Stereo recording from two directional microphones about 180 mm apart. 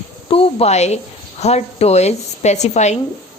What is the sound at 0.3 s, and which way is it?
A woman's voice, 30° left (ahead or behind).